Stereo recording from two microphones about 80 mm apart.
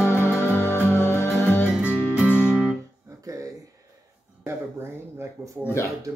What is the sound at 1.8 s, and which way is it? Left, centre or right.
Music, right.